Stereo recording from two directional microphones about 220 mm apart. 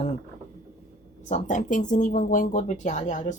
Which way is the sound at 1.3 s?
35° left (ahead or behind).